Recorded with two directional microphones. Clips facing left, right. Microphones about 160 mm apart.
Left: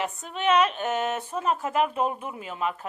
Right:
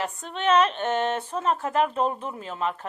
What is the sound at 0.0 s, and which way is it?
Speech, 5° left (ahead or behind).